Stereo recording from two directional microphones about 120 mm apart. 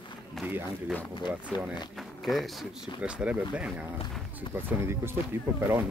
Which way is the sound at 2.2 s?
Centre (ahead or behind).